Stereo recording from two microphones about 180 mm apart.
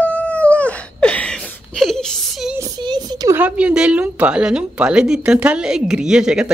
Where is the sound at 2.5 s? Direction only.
20° right (ahead or behind).